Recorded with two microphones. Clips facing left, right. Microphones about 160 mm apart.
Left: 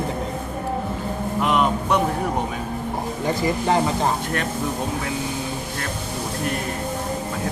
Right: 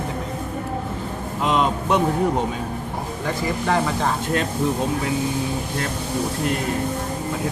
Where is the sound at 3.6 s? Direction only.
25° left (ahead or behind).